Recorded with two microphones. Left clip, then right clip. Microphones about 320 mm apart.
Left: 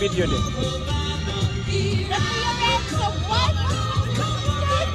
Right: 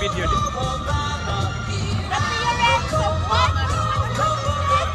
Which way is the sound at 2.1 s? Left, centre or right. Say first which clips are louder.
Right 3 dB; centre.